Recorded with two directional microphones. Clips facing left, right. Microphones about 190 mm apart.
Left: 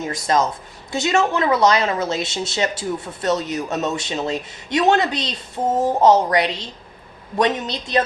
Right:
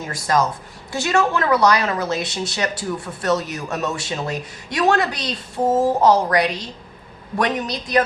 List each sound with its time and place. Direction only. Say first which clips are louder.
0.0 s speech: left 1 dB; 20° left (ahead or behind)